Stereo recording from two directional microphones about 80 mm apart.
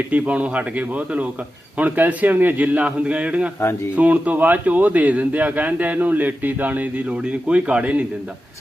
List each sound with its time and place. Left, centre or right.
0.1 s a man's voice: centre